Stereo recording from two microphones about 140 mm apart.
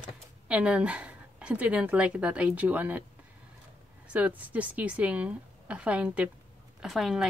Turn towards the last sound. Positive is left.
turn(degrees=0)  # may be behind; listen again after turning